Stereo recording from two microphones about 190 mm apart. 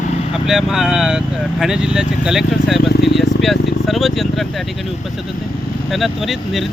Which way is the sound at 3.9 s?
Centre (ahead or behind).